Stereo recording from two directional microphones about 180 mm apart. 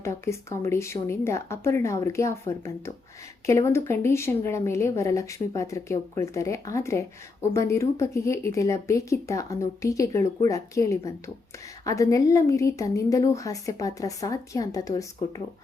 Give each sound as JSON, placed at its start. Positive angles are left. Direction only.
{"t": 0.0, "sound": "speech", "side_deg": 15}